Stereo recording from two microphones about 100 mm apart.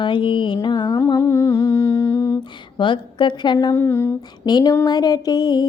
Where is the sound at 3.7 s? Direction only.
25° left (ahead or behind).